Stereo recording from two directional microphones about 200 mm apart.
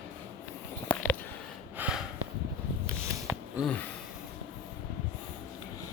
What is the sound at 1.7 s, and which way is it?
Snort, 5° right (ahead or behind).